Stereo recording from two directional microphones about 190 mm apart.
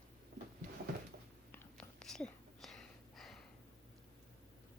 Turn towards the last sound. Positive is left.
turn(degrees=0)  # may be behind; listen again after turning